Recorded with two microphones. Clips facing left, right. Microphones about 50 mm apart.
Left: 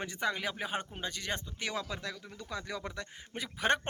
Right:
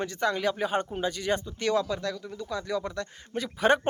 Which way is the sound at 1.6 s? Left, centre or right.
Centre.